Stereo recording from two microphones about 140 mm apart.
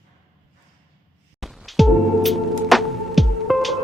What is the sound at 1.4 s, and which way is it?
Music, centre (ahead or behind).